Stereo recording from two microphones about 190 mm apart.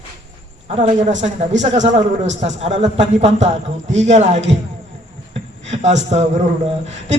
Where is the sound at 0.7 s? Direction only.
35° right (ahead or behind).